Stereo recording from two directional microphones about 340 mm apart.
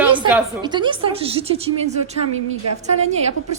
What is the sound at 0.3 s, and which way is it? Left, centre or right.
A woman's voice, centre.